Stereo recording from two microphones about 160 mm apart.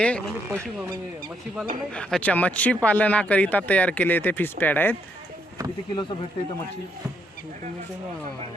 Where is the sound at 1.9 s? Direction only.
5° left (ahead or behind).